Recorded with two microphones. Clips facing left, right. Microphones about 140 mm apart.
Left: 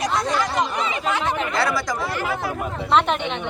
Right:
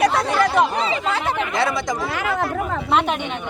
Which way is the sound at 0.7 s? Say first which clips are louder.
Right 2 dB; 30° right (ahead or behind).